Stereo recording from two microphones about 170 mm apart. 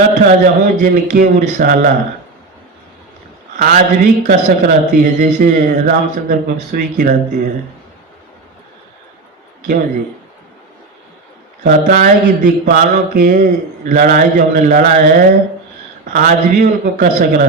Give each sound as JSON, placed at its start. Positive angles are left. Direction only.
{"t": 0.4, "sound": "speech", "side_deg": -55}
{"t": 3.6, "sound": "speech", "side_deg": -55}
{"t": 11.6, "sound": "speech", "side_deg": -50}